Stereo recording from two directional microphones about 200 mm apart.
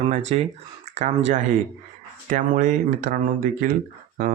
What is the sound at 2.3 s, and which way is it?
Speech, 40° right (ahead or behind).